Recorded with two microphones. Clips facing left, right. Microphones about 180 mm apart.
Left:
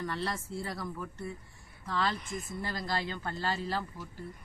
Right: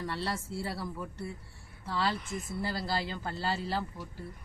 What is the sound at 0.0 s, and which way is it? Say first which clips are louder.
A woman's voice: even; 30° right (ahead or behind).